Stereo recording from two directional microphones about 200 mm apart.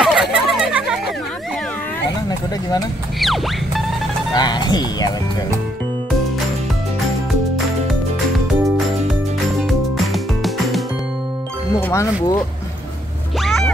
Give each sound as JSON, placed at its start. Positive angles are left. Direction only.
{"t": 0.0, "sound": "a sound", "side_deg": -5}
{"t": 3.2, "sound": "music", "side_deg": 0}
{"t": 4.4, "sound": "music", "side_deg": 20}
{"t": 9.7, "sound": "music", "side_deg": 0}
{"t": 11.7, "sound": "music", "side_deg": 15}
{"t": 13.4, "sound": "a sound", "side_deg": 0}